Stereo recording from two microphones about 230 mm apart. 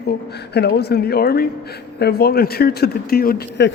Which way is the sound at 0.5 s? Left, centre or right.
Left.